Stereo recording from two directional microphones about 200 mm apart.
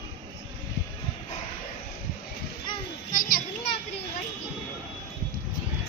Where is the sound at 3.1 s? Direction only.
45° left (ahead or behind).